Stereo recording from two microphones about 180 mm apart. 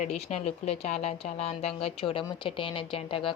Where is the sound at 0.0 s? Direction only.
40° left (ahead or behind).